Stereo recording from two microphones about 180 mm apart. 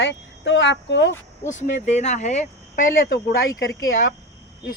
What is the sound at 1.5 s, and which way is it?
Speech, 45° left (ahead or behind).